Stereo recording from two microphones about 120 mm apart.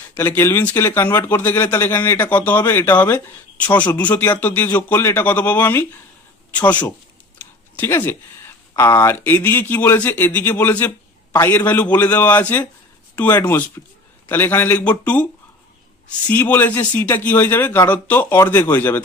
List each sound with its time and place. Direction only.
0.2 s speech: 20° left (ahead or behind)
7.3 s a sound: 15° left (ahead or behind)
8.7 s speech: 20° left (ahead or behind)
16.3 s speech: 15° left (ahead or behind)